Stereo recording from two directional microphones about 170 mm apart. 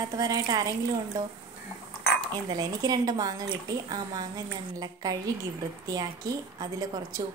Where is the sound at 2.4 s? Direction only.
25° right (ahead or behind).